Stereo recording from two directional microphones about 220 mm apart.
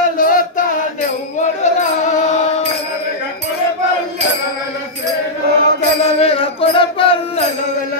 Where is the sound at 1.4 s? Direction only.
30° left (ahead or behind).